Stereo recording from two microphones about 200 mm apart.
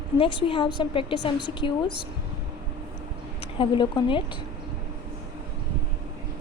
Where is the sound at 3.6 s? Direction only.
25° left (ahead or behind).